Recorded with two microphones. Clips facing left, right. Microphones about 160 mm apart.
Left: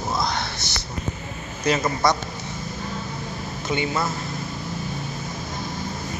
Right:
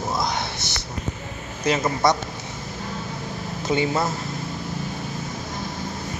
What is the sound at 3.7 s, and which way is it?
Speech, 35° right (ahead or behind).